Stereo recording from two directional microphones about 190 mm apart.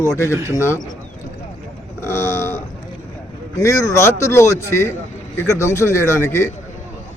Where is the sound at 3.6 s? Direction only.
15° left (ahead or behind).